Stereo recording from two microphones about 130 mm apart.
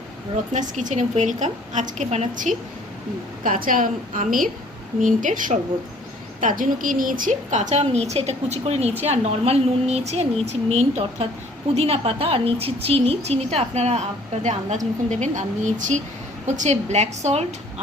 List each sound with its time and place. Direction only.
0.5 s a woman's voice: 75° right (ahead or behind); by 2.3 s 55° right (ahead or behind)
2.3 s a woman's voice: 80° right; by 14.0 s 55° right (ahead or behind)
15.1 s a woman's voice: 65° right (ahead or behind)